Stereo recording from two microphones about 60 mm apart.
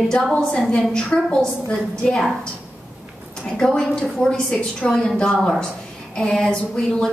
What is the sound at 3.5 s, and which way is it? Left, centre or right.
A woman's voice, centre.